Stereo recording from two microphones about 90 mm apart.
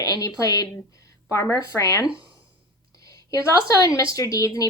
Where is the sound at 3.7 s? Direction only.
40° left (ahead or behind).